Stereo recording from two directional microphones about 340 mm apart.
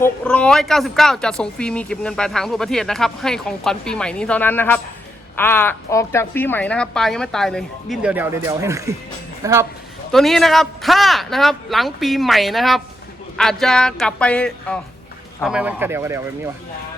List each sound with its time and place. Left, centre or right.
0.0 s speech: centre